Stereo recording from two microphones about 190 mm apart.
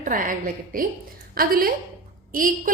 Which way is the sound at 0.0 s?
45° right (ahead or behind).